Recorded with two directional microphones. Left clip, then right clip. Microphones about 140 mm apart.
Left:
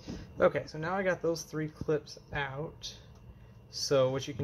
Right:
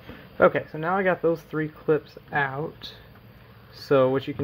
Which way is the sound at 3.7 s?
25° right (ahead or behind).